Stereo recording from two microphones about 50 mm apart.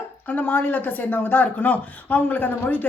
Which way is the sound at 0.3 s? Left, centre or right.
Left.